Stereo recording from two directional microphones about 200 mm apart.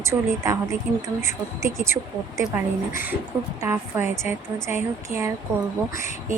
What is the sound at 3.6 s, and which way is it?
Speech, 10° right (ahead or behind).